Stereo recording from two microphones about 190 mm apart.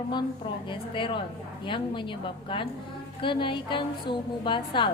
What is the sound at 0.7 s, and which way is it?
A woman's voice, 25° left (ahead or behind).